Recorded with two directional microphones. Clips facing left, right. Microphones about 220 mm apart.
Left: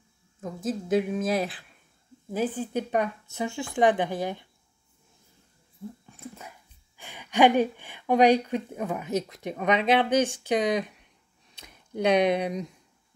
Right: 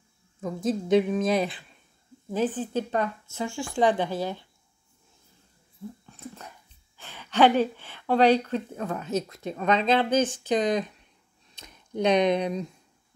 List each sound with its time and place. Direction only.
0.4 s a woman's voice: centre (ahead or behind); by 4.5 s 20° left (ahead or behind)
6.0 s dog: 10° left (ahead or behind)
7.0 s a woman's voice: 15° left (ahead or behind)